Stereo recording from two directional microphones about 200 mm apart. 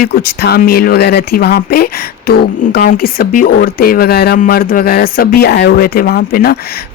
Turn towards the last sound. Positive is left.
turn(degrees=50)  # may be behind; listen again after turning